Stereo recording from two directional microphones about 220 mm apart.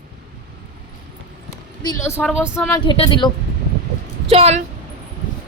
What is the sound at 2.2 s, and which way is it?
Speech, 5° right (ahead or behind).